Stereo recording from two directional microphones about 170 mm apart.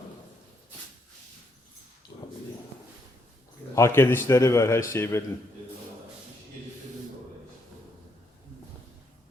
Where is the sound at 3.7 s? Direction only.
15° left (ahead or behind).